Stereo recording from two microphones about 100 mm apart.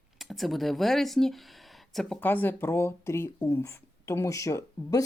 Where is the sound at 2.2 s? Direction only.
20° left (ahead or behind).